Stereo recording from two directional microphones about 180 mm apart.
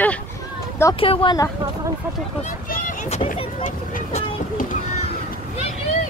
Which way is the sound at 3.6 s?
45° left (ahead or behind).